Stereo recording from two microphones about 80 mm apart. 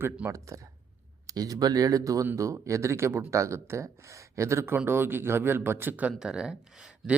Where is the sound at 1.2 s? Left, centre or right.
Right.